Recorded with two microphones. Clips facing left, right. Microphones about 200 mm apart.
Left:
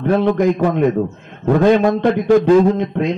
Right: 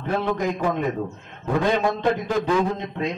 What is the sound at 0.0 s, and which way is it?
Speech, 60° left (ahead or behind).